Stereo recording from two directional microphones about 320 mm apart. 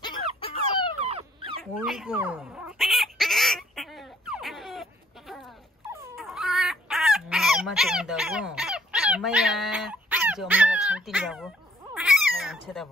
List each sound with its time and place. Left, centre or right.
0.4 s fowl: centre
1.0 s dog: centre
1.6 s a sound: centre
5.9 s dog: centre